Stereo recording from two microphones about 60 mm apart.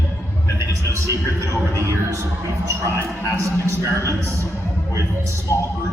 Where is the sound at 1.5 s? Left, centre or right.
Right.